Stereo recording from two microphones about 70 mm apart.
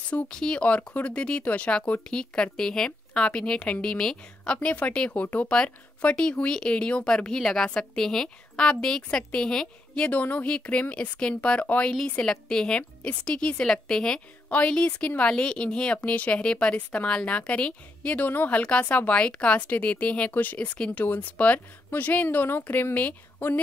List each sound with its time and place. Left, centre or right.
0.1 s a woman's voice: centre
4.6 s speech: left